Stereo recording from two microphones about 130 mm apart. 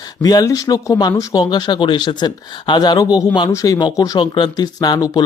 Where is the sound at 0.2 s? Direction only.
30° left (ahead or behind).